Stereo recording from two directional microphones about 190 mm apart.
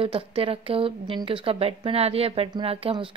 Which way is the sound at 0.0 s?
30° right (ahead or behind).